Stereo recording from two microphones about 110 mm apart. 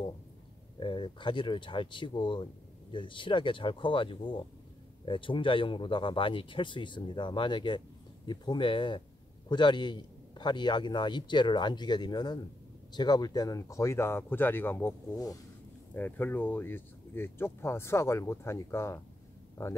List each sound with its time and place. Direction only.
0.7 s speech: 45° left (ahead or behind); by 18.9 s 25° left (ahead or behind)